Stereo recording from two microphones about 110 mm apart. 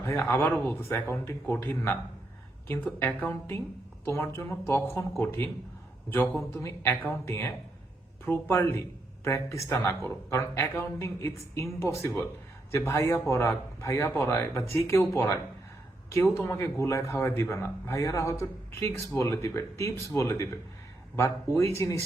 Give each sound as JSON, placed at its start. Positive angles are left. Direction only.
{"t": 0.0, "sound": "a man's voice", "side_deg": 25}
{"t": 6.1, "sound": "a woman's voice", "side_deg": 20}